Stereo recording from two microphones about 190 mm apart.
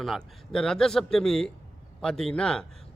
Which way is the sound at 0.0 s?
Centre (ahead or behind).